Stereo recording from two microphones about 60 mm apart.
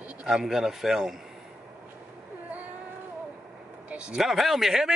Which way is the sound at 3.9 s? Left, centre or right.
Centre.